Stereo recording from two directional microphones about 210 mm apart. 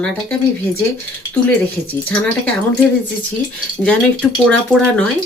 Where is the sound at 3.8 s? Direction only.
5° left (ahead or behind).